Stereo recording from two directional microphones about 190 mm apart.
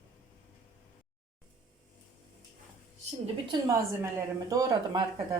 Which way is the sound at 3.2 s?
20° right (ahead or behind).